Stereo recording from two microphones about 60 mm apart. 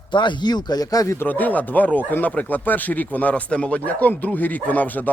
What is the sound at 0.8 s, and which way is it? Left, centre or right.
Speech, left.